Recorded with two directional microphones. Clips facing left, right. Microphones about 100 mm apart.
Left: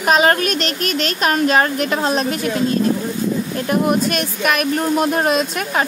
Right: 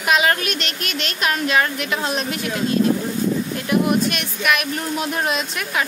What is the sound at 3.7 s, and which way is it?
Speech, 40° left (ahead or behind).